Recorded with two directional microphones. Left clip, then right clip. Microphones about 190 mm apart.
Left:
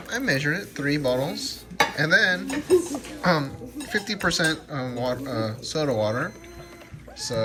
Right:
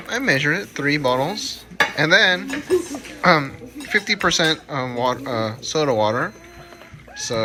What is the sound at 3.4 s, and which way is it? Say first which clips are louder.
Speech: right 4 dB; 20° right (ahead or behind).